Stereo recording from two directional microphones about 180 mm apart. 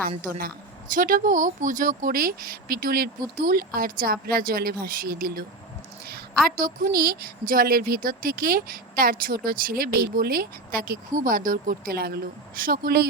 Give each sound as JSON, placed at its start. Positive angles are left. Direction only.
{"t": 0.3, "sound": "speech", "side_deg": -55}
{"t": 6.6, "sound": "a woman's voice", "side_deg": -50}